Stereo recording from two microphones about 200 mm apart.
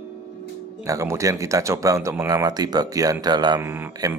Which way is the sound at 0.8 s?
15° right (ahead or behind).